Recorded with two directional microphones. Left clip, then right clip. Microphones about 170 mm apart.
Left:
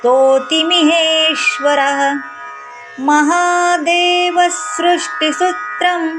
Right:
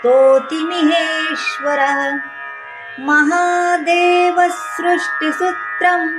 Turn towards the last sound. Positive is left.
turn(degrees=15)  # may be behind; listen again after turning